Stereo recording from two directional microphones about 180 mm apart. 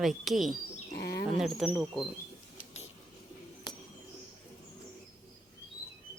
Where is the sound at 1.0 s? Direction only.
65° left (ahead or behind).